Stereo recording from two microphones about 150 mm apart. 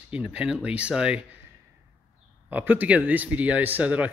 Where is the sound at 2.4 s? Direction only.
10° right (ahead or behind).